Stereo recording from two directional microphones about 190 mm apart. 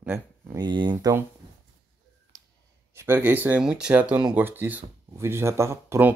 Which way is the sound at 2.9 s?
10° right (ahead or behind).